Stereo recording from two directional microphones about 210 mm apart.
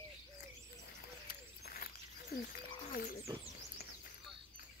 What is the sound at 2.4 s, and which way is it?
Frog, 45° left (ahead or behind).